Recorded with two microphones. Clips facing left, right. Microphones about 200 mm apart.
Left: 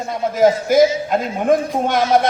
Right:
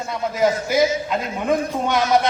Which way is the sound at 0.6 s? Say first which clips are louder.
Left 5 dB; 50° left (ahead or behind).